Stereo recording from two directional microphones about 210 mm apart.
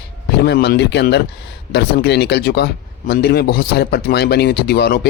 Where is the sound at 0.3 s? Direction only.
55° left (ahead or behind).